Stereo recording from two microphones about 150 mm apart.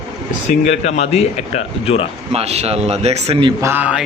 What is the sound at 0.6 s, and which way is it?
A man's voice, 45° left (ahead or behind).